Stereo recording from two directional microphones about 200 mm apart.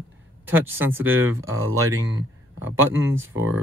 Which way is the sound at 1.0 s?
10° right (ahead or behind).